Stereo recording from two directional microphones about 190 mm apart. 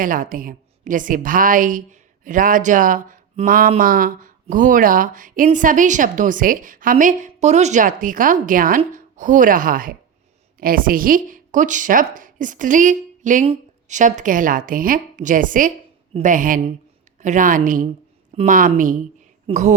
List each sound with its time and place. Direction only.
0.0 s a woman's voice: 45° right (ahead or behind)